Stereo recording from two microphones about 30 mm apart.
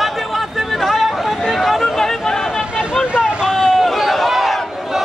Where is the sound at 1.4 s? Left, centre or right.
Centre.